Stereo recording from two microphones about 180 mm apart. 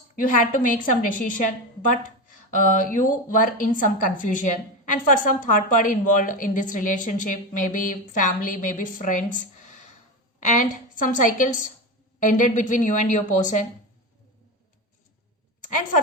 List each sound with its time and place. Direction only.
0.2 s a woman's voice: 50° left (ahead or behind)